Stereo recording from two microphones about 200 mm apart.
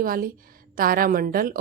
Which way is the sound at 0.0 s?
45° right (ahead or behind).